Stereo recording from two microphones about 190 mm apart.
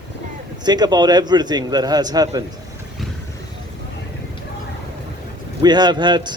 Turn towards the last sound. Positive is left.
turn(degrees=-25)  # may be behind; listen again after turning